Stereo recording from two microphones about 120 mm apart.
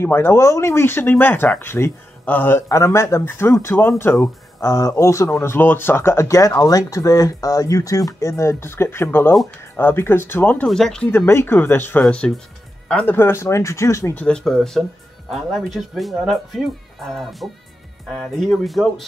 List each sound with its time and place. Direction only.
0.0 s speech: 20° left (ahead or behind)
10.7 s speech: 5° left (ahead or behind)
11.1 s speech: 20° left (ahead or behind)
14.2 s speech: 5° left (ahead or behind)